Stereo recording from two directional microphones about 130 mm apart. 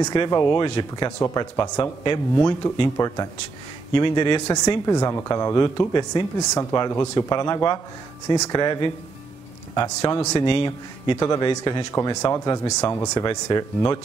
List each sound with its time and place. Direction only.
0.0 s speech: 35° left (ahead or behind)
3.9 s speech: 35° left (ahead or behind)
10.4 s speech: 40° left (ahead or behind)
11.1 s speech: 25° left (ahead or behind)